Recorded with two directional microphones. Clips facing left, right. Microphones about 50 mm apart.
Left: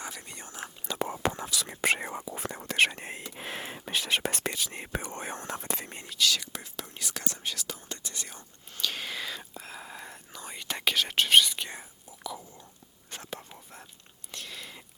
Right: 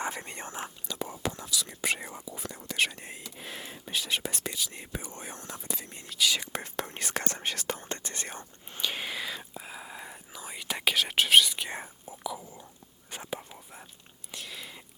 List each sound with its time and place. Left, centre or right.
0.0 s speech: right
0.9 s whispering: left
1.8 s speech: left
5.5 s speech: left
5.8 s speech: left
6.1 s speech: centre
6.5 s speech: right
8.7 s whispering: centre
12.2 s speech: centre
13.1 s whispering: centre